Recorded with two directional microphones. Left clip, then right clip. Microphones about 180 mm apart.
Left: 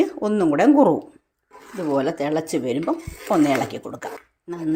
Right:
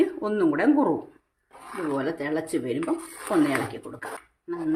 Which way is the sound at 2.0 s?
35° left (ahead or behind).